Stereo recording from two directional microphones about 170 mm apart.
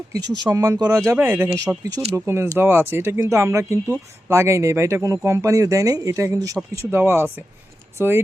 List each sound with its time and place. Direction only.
0.4 s speech: 15° right (ahead or behind)